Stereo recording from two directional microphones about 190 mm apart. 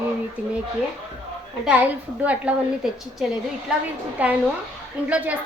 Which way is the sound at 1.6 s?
5° right (ahead or behind).